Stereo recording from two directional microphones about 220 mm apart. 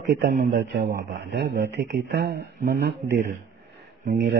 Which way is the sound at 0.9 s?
50° right (ahead or behind).